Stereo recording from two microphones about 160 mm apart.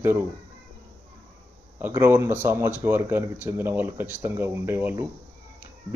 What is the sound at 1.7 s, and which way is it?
Speech, 15° right (ahead or behind).